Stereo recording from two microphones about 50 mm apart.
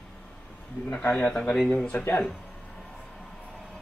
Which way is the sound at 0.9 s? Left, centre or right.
Left.